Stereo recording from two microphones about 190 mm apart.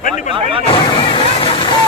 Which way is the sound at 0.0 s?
40° left (ahead or behind).